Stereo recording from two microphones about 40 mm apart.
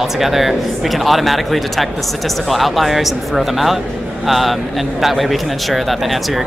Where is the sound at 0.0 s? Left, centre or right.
Centre.